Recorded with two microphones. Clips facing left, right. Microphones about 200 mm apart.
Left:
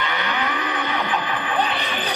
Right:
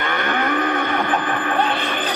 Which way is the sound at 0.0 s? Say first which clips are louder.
Right 4 dB; 50° right (ahead or behind).